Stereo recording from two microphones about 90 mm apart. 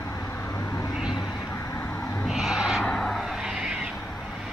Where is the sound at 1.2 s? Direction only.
30° left (ahead or behind).